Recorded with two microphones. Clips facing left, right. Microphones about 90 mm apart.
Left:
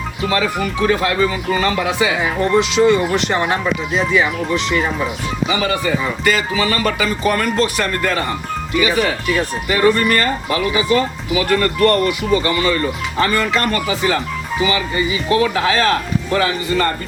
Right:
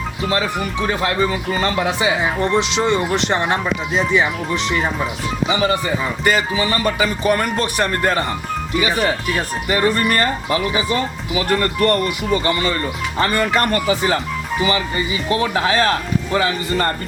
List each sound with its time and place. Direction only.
0.3 s speech: 25° right (ahead or behind)
5.5 s speech: 30° right (ahead or behind)
7.8 s speech: 30° right (ahead or behind)